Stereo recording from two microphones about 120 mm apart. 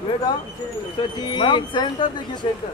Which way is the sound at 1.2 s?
40° left (ahead or behind).